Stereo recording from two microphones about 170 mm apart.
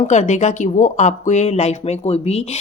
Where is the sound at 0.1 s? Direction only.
45° left (ahead or behind).